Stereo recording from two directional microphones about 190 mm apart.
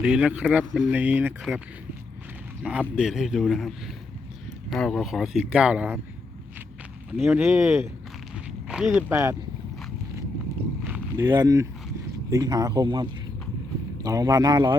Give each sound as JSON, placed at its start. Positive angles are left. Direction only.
{"t": 0.0, "sound": "speech", "side_deg": -5}
{"t": 2.9, "sound": "speech", "side_deg": -5}
{"t": 7.2, "sound": "speech", "side_deg": -5}
{"t": 10.8, "sound": "a sound", "side_deg": -10}
{"t": 11.3, "sound": "speech", "side_deg": -20}